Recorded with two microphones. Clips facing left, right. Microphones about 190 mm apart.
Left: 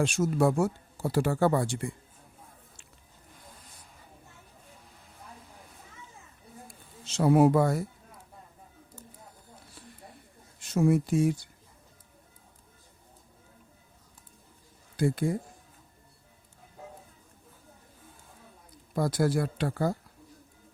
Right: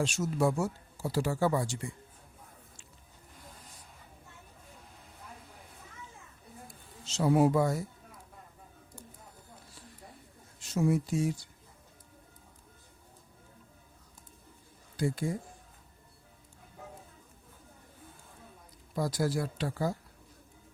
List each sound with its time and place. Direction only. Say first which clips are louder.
0.0 s speech: left 4 dB; 55° left (ahead or behind)
7.0 s speech: left 4 dB; 55° left (ahead or behind)
10.6 s speech: left 4 dB; 55° left (ahead or behind)
14.9 s speech: left 5 dB; 55° left (ahead or behind)
18.9 s speech: left 4 dB; 60° left (ahead or behind)